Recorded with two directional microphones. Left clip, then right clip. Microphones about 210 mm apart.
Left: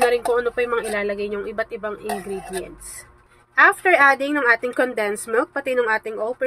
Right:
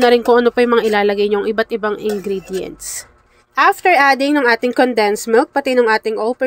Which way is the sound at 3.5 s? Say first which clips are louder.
Right 3 dB; 40° right (ahead or behind).